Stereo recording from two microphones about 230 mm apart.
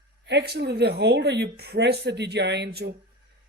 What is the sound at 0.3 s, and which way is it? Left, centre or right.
Speech, right.